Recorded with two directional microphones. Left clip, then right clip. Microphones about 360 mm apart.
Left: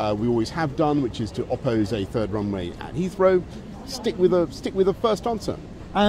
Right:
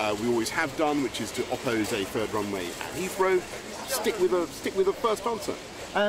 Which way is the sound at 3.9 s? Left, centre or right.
Left.